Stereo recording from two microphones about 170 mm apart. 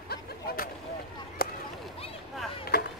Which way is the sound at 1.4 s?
60° left (ahead or behind).